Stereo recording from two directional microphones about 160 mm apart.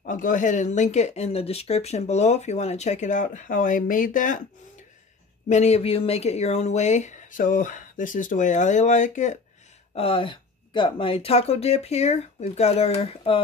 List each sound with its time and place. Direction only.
0.0 s speech: 55° left (ahead or behind)
5.5 s speech: 40° left (ahead or behind)
9.9 s speech: 35° left (ahead or behind)